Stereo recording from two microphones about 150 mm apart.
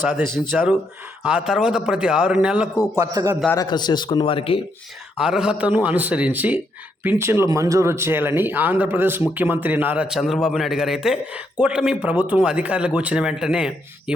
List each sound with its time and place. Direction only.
0.0 s a man's voice: 5° right (ahead or behind)
2.7 s a man's voice: 20° left (ahead or behind)
3.0 s a man's voice: 20° right (ahead or behind)
3.7 s speech: 30° left (ahead or behind)
5.2 s a man's voice: 5° right (ahead or behind)